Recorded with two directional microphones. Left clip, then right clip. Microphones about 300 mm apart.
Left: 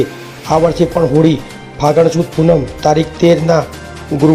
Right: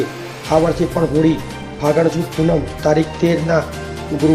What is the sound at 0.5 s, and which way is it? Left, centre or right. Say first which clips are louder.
Speech: left 2 dB; left.